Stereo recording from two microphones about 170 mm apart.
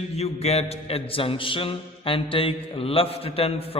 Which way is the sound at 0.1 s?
40° left (ahead or behind).